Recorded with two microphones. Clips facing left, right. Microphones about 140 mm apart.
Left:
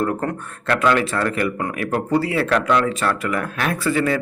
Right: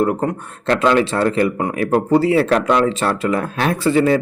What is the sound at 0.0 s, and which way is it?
Speech, 20° right (ahead or behind).